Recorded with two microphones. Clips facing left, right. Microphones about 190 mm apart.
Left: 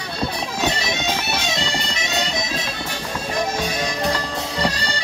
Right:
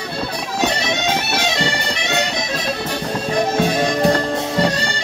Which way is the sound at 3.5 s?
55° right (ahead or behind).